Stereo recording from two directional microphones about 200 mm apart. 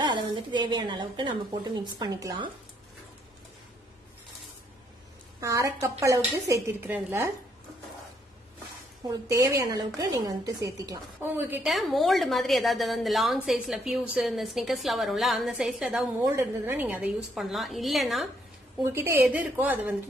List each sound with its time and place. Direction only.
0.0 s a woman's voice: 25° right (ahead or behind)
5.4 s a woman's voice: 15° right (ahead or behind)
9.0 s a woman's voice: 15° right (ahead or behind); by 18.3 s centre (ahead or behind)
18.8 s a woman's voice: 10° right (ahead or behind)